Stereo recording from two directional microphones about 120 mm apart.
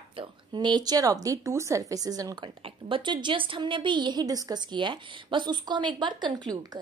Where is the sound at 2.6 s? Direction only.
50° right (ahead or behind).